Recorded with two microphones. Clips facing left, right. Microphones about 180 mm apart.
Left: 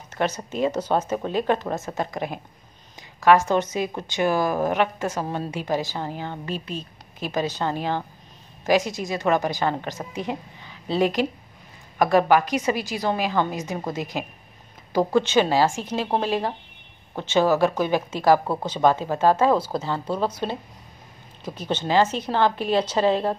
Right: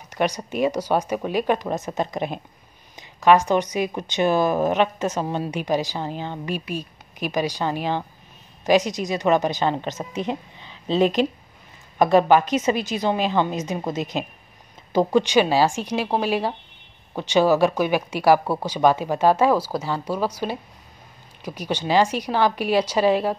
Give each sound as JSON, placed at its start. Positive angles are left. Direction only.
{"t": 0.1, "sound": "a woman's voice", "side_deg": -15}